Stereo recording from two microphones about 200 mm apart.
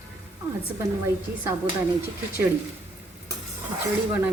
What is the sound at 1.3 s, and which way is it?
Speech, 55° right (ahead or behind).